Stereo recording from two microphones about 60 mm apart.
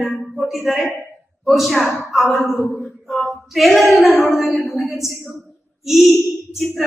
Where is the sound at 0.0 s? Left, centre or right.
Centre.